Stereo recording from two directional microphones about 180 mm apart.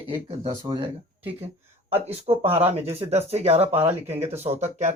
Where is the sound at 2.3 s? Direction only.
35° right (ahead or behind).